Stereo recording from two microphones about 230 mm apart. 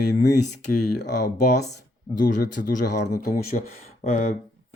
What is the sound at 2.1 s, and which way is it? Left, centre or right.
Speech, left.